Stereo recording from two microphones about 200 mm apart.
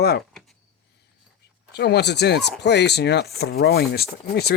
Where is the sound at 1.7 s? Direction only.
55° left (ahead or behind).